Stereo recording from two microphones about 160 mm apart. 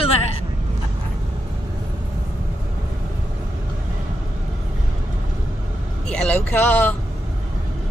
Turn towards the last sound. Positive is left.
turn(degrees=10)  # may be behind; listen again after turning